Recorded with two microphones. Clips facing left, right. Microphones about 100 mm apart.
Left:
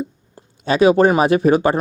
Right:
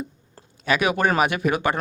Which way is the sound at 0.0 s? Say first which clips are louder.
Left 6 dB; 25° left (ahead or behind).